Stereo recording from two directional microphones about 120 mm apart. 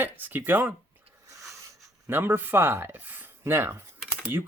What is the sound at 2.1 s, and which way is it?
Speech, 20° right (ahead or behind).